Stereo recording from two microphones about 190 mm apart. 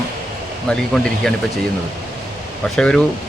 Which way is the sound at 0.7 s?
5° left (ahead or behind).